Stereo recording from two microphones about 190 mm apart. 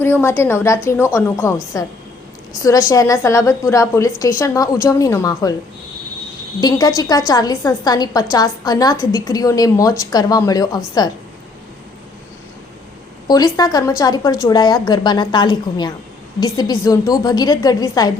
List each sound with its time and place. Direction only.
0.0 s a woman's voice: 10° left (ahead or behind)
6.6 s a woman's voice: 20° left (ahead or behind)
13.2 s a woman's voice: 20° left (ahead or behind)